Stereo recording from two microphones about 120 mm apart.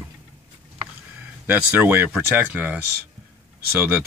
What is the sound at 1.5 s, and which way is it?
Speech, 15° right (ahead or behind).